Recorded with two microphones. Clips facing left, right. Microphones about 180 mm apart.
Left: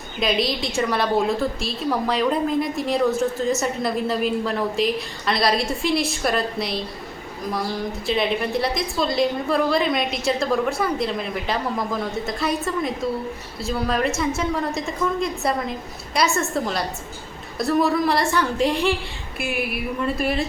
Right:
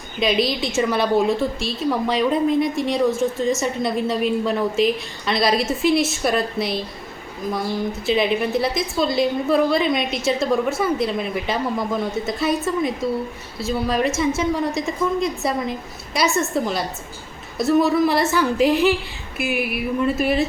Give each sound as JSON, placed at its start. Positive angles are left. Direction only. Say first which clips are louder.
{"t": 0.2, "sound": "a woman's voice", "louder": "right 2 dB", "side_deg": 0}
{"t": 8.0, "sound": "a woman's voice", "louder": "right 3 dB", "side_deg": 0}